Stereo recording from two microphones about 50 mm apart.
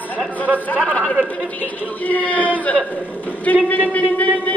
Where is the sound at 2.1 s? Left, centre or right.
Left.